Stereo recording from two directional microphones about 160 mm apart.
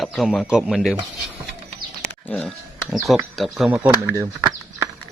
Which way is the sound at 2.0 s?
5° left (ahead or behind).